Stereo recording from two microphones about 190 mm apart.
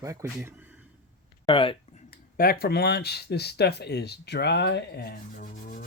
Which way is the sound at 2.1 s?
50° left (ahead or behind).